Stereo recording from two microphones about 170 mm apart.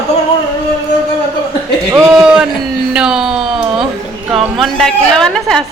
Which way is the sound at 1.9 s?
10° right (ahead or behind).